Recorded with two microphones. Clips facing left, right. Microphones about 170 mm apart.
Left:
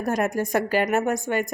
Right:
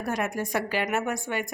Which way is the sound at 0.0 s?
45° left (ahead or behind).